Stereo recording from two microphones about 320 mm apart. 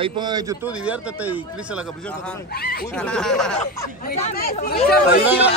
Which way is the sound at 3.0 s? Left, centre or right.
Centre.